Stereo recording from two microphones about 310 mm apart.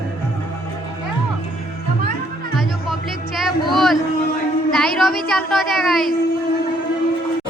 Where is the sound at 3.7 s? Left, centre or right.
Centre.